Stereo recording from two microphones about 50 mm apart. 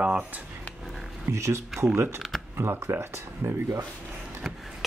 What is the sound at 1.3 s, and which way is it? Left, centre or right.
Speech, right.